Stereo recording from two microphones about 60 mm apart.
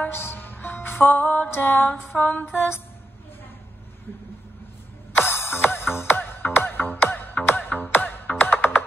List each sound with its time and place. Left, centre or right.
0.1 s music: left
5.1 s music: left